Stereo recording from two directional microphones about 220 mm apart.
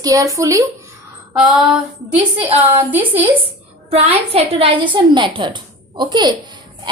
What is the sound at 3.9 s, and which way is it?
A woman's voice, 30° right (ahead or behind).